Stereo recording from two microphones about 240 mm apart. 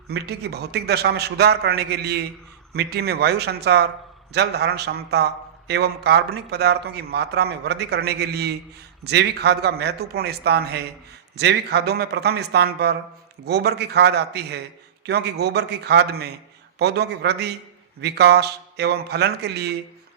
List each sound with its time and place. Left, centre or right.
0.1 s a man's voice: right